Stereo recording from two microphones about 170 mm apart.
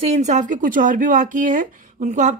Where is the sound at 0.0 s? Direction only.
40° right (ahead or behind).